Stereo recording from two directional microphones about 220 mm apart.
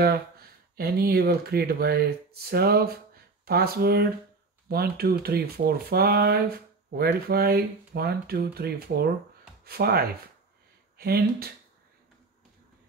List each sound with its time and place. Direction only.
0.0 s speech: 45° right (ahead or behind)